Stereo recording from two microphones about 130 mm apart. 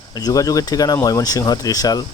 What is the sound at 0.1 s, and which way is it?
Speech, 30° left (ahead or behind).